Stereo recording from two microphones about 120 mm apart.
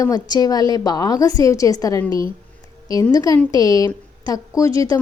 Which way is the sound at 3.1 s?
30° left (ahead or behind).